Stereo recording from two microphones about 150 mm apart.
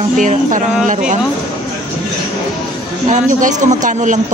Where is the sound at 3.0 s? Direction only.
55° right (ahead or behind).